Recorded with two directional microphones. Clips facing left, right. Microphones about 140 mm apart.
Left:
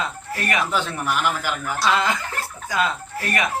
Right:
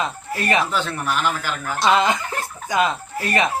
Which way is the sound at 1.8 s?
20° right (ahead or behind).